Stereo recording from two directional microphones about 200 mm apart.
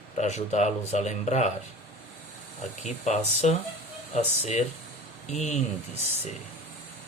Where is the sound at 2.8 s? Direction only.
35° left (ahead or behind).